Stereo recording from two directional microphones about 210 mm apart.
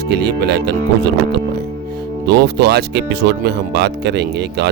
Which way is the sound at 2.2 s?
50° right (ahead or behind).